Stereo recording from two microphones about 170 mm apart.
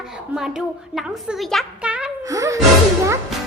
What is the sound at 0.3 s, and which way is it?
A woman's voice, 5° right (ahead or behind).